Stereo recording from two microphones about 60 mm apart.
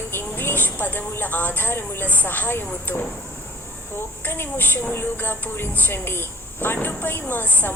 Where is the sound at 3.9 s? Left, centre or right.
Left.